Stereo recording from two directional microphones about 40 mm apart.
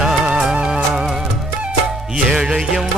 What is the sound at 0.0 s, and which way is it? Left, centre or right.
Music, centre.